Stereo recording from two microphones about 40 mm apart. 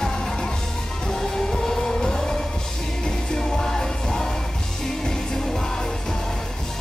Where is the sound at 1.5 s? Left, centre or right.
Centre.